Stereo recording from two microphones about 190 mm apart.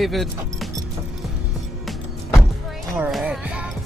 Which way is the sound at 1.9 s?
Centre (ahead or behind).